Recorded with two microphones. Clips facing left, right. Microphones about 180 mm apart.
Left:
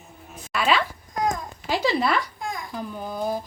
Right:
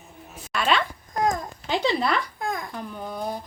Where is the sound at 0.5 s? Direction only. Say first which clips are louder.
Left 1 dB; centre (ahead or behind).